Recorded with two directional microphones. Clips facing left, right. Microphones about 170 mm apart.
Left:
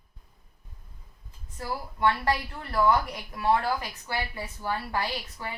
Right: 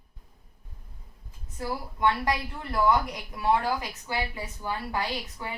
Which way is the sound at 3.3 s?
15° right (ahead or behind).